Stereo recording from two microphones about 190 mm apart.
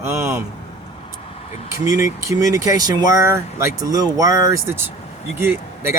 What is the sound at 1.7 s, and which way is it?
Speech, 15° right (ahead or behind).